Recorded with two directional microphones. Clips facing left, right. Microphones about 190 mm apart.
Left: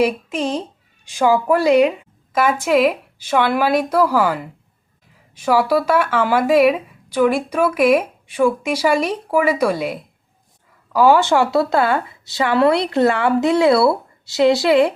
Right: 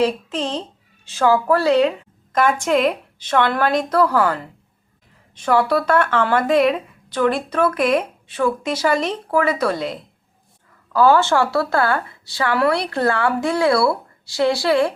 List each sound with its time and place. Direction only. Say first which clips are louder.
0.0 s a woman's voice: left 2 dB; 10° left (ahead or behind)